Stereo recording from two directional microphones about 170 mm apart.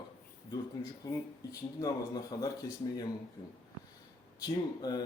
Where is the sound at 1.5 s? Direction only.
20° left (ahead or behind).